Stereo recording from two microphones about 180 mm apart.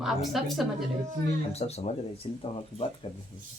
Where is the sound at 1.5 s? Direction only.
35° left (ahead or behind).